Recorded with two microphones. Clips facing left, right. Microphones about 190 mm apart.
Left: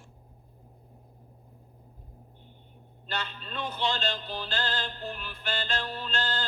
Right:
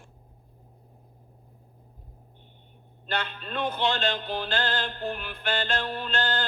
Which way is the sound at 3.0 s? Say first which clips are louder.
Right 4 dB; 55° right (ahead or behind).